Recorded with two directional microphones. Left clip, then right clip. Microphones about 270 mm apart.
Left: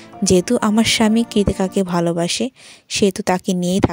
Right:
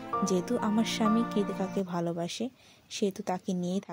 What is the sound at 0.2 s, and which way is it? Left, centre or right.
A woman's voice, left.